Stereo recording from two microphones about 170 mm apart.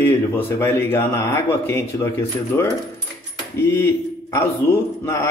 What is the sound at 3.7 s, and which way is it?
Speech, 15° left (ahead or behind).